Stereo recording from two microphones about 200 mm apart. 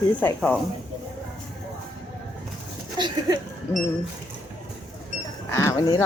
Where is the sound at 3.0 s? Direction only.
20° right (ahead or behind).